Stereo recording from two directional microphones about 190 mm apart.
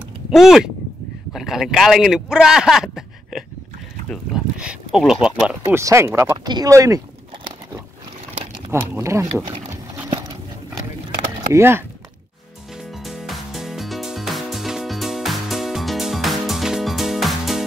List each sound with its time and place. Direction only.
0.3 s speech: centre (ahead or behind)
5.8 s speech: 15° right (ahead or behind)
8.6 s a sound: 15° right (ahead or behind)
11.5 s speech: 10° right (ahead or behind)
13.0 s music: centre (ahead or behind)